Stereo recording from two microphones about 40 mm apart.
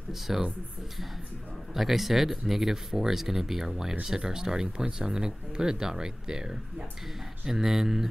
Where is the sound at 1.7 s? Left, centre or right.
Centre.